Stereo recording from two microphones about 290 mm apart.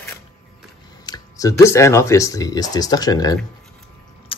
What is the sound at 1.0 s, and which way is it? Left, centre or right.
Speech, centre.